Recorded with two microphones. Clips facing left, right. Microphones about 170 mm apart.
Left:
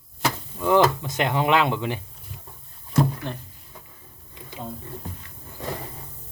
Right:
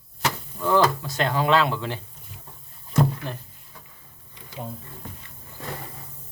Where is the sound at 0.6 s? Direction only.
15° left (ahead or behind).